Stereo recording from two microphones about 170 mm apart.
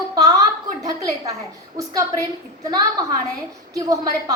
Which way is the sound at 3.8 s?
20° right (ahead or behind).